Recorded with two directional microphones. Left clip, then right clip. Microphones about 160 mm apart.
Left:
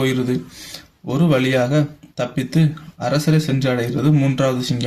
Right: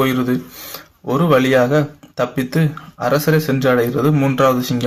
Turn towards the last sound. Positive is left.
turn(degrees=0)  # may be behind; listen again after turning